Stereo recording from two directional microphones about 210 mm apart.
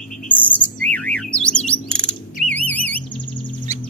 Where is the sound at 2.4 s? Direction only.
5° left (ahead or behind).